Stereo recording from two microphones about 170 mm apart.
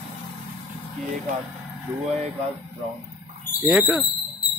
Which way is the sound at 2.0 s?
40° right (ahead or behind).